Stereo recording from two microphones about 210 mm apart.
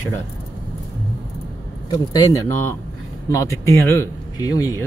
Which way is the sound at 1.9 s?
15° left (ahead or behind).